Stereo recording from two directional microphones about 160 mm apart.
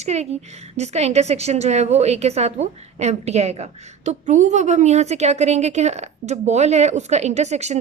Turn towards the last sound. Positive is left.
turn(degrees=-45)  # may be behind; listen again after turning